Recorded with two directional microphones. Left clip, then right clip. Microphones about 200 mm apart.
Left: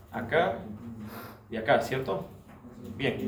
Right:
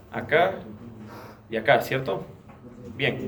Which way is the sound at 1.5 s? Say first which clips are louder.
Right 5 dB; 55° right (ahead or behind).